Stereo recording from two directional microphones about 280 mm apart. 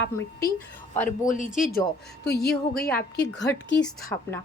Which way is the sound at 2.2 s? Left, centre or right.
Left.